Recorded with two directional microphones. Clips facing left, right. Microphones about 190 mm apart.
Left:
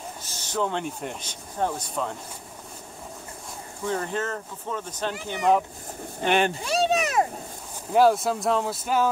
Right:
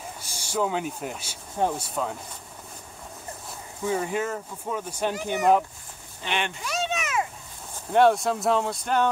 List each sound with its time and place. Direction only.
0.2 s speech: 10° right (ahead or behind)
3.8 s speech: 10° right (ahead or behind)
6.2 s a sound: 40° left (ahead or behind)
7.9 s speech: centre (ahead or behind)